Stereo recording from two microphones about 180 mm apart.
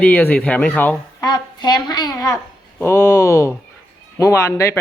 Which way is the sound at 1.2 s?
25° left (ahead or behind).